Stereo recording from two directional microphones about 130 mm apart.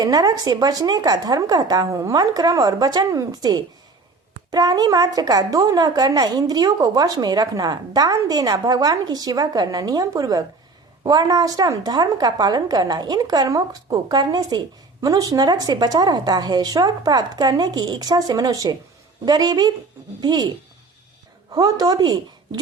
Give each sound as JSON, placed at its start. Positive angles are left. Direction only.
{"t": 0.0, "sound": "a woman's voice", "side_deg": -30}
{"t": 21.5, "sound": "a woman's voice", "side_deg": -30}